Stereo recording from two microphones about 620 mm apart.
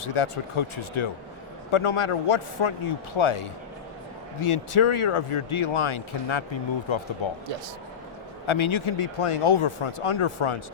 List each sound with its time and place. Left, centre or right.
0.0 s speech: left
8.4 s speech: left